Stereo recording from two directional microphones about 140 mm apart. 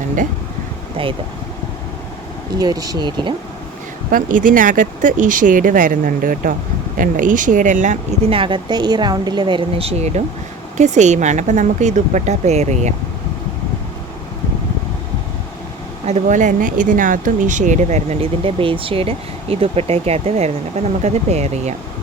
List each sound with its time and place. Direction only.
1.0 s speech: 40° right (ahead or behind)
2.6 s speech: 25° right (ahead or behind)
4.1 s speech: 70° right (ahead or behind)
8.3 s speech: 35° right (ahead or behind); by 12.9 s 55° right (ahead or behind)
16.0 s speech: 60° right (ahead or behind)